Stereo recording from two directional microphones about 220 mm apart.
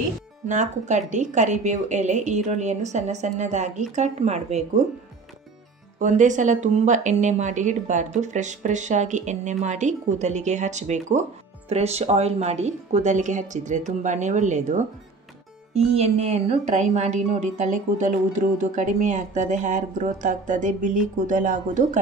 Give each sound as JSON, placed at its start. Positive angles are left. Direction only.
{"t": 0.5, "sound": "a woman's voice", "side_deg": -35}
{"t": 5.9, "sound": "a woman's voice", "side_deg": -35}